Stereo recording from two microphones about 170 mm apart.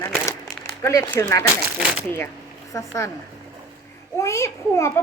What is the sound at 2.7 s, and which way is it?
Speech, 20° left (ahead or behind).